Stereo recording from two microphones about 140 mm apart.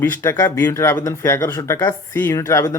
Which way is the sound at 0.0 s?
15° left (ahead or behind).